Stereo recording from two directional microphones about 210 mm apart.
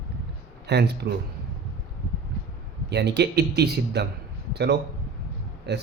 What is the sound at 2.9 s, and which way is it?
Speech, 55° right (ahead or behind).